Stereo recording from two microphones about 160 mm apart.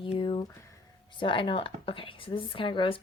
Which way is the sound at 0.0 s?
30° left (ahead or behind).